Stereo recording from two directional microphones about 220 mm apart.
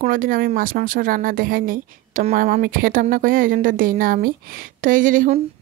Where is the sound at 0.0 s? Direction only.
40° right (ahead or behind).